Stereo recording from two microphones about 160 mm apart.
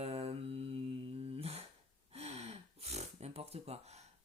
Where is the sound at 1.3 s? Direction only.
40° right (ahead or behind).